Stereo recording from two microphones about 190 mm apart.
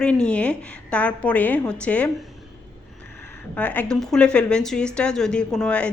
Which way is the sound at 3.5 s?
10° left (ahead or behind).